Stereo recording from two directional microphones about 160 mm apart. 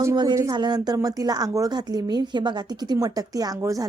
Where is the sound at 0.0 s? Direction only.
25° right (ahead or behind).